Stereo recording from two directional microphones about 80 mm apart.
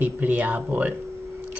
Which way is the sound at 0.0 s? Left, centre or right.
Right.